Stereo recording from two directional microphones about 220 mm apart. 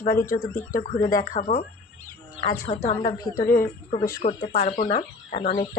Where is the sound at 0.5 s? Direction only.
35° left (ahead or behind).